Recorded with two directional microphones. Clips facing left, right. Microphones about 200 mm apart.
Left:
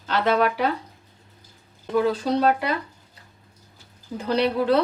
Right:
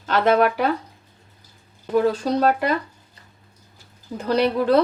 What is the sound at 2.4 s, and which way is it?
Speech, 45° right (ahead or behind).